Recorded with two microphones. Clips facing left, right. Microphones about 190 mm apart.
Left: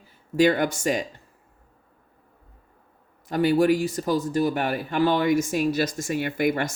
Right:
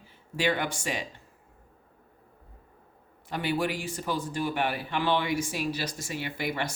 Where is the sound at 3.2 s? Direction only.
40° left (ahead or behind).